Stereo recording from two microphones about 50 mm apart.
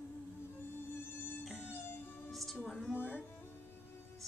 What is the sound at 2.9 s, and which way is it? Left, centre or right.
Music, left.